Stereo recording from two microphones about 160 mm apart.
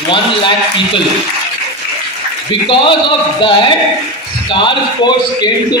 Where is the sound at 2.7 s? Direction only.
30° left (ahead or behind).